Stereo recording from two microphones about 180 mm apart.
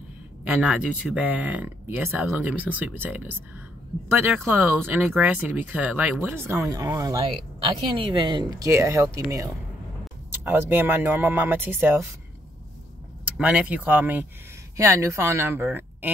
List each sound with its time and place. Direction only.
0.6 s speech: 5° right (ahead or behind)
10.4 s speech: 15° right (ahead or behind)
13.2 s speech: 5° right (ahead or behind)